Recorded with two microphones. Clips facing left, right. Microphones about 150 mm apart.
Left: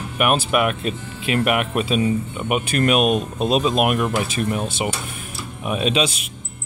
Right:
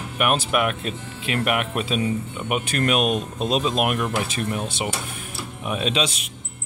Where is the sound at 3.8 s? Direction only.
10° left (ahead or behind).